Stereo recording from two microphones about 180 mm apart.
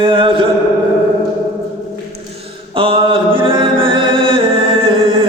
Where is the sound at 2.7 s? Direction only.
30° right (ahead or behind).